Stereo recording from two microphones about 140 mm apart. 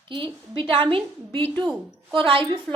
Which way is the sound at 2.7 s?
5° left (ahead or behind).